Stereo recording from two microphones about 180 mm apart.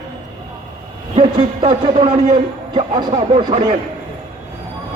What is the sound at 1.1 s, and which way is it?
Speech, 30° right (ahead or behind).